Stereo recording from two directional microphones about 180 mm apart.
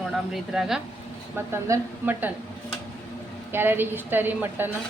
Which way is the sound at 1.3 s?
10° right (ahead or behind).